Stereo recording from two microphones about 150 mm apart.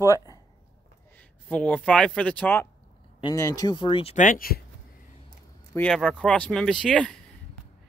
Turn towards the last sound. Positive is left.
turn(degrees=5)  # may be behind; listen again after turning